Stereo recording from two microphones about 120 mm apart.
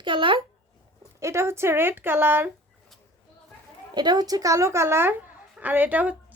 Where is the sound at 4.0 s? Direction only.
35° right (ahead or behind).